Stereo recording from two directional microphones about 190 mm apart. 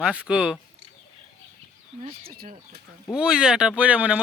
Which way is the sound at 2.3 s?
50° right (ahead or behind).